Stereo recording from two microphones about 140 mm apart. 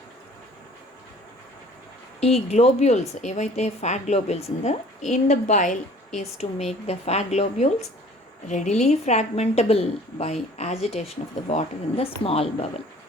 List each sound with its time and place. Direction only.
2.2 s a woman's voice: 50° left (ahead or behind)
6.4 s a woman's voice: 50° left (ahead or behind)